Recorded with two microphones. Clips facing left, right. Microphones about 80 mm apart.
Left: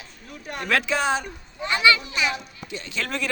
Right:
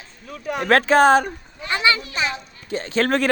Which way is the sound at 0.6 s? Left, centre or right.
Right.